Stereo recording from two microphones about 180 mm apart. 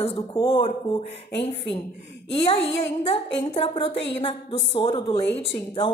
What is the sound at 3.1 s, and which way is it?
A woman's voice, 35° left (ahead or behind).